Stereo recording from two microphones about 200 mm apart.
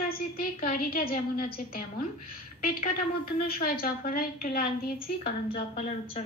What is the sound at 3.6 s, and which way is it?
A woman's voice, 45° left (ahead or behind).